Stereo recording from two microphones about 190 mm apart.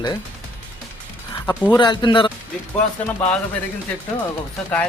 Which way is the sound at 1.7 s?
25° left (ahead or behind).